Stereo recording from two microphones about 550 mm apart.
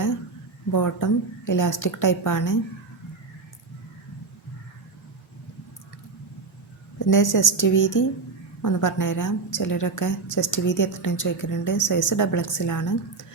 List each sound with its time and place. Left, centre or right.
0.7 s a woman's voice: left
7.1 s a woman's voice: left